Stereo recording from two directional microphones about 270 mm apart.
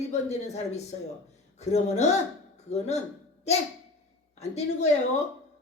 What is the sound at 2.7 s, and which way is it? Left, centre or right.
Speech, left.